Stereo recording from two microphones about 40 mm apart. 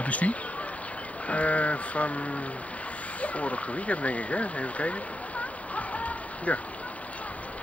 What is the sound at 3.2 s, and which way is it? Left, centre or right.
Speech, left.